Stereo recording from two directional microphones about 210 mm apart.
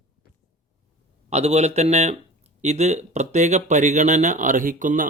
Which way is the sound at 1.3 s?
30° right (ahead or behind).